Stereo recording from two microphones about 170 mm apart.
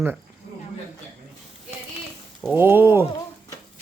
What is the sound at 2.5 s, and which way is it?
Speech, 15° right (ahead or behind).